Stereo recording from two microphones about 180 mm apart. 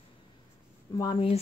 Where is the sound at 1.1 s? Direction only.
35° left (ahead or behind).